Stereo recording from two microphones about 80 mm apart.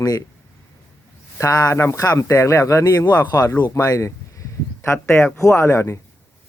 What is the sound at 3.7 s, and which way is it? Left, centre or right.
Speech, left.